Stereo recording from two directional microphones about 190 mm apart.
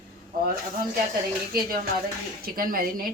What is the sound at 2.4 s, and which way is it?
Speech, 50° right (ahead or behind).